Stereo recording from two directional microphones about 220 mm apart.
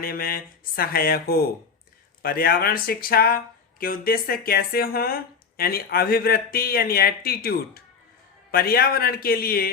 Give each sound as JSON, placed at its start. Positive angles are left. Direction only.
{"t": 0.0, "sound": "speech", "side_deg": 40}